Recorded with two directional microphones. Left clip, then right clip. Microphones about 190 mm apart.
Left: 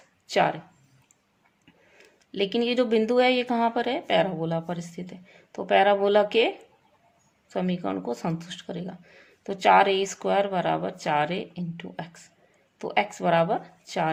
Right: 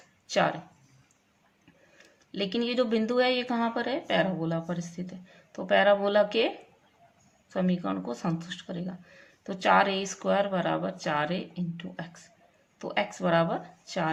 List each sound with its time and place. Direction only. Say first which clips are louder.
0.3 s speech: left 3 dB; 35° left (ahead or behind)
2.0 s speech: left 5 dB; 30° left (ahead or behind)
7.5 s speech: left 2 dB; 30° left (ahead or behind)